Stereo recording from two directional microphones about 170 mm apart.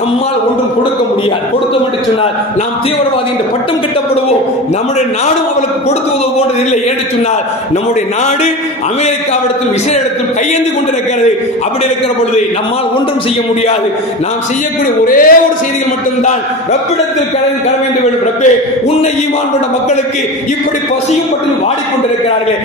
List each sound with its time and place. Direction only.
15.0 s speech: 55° left (ahead or behind)
18.4 s a man's voice: 40° left (ahead or behind)